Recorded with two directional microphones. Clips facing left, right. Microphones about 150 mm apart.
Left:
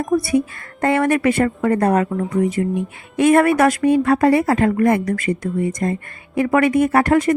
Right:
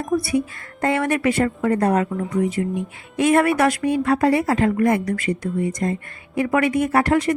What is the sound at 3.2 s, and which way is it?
A woman's voice, 50° left (ahead or behind).